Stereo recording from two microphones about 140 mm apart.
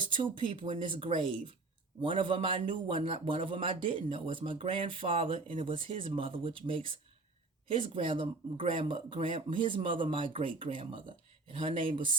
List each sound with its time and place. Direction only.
0.0 s speech: 35° right (ahead or behind)